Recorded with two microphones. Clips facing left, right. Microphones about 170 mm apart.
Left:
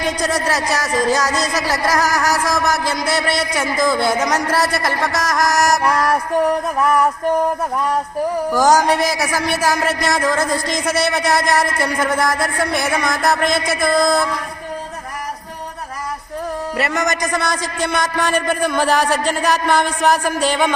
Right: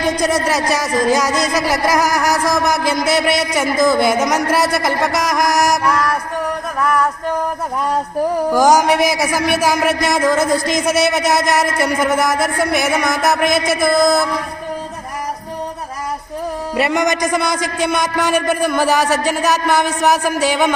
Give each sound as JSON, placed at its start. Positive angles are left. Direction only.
{"t": 0.4, "sound": "a man's voice", "side_deg": -10}
{"t": 6.7, "sound": "music", "side_deg": 20}
{"t": 8.5, "sound": "a man's voice", "side_deg": -10}
{"t": 16.7, "sound": "a man's voice", "side_deg": -20}